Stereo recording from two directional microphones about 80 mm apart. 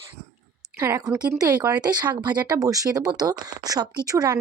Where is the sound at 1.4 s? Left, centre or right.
Right.